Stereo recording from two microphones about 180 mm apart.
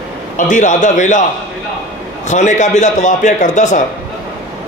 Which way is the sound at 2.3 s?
40° left (ahead or behind).